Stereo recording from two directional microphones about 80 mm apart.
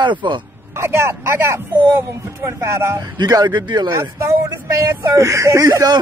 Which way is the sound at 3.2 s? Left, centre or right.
Right.